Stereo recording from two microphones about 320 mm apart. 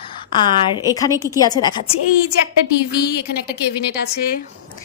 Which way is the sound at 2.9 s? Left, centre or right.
Left.